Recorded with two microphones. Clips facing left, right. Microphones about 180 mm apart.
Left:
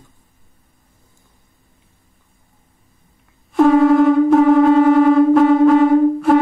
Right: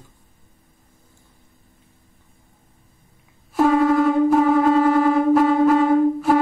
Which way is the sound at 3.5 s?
Centre (ahead or behind).